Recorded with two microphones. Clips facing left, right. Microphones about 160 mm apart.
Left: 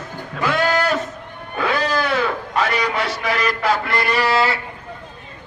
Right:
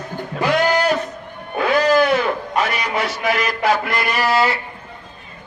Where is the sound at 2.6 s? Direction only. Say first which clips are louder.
Left 2 dB; 20° right (ahead or behind).